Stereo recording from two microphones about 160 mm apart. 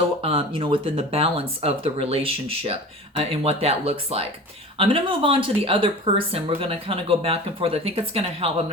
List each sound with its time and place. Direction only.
0.2 s speech: 35° right (ahead or behind)